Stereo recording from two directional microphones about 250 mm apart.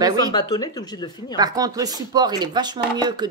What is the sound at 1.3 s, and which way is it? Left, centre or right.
Speech, centre.